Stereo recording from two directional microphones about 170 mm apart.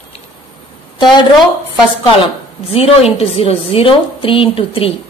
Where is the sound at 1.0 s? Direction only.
25° left (ahead or behind).